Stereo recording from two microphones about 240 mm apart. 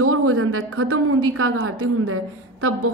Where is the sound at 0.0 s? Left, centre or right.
Right.